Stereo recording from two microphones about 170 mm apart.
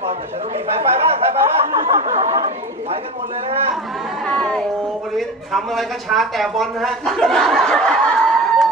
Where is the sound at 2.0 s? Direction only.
40° right (ahead or behind).